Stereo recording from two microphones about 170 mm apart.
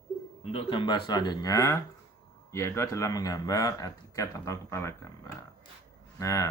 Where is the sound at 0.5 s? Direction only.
30° left (ahead or behind).